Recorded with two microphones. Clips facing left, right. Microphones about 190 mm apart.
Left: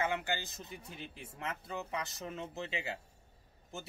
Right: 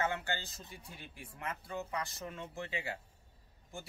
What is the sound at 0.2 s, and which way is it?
Speech, 15° left (ahead or behind).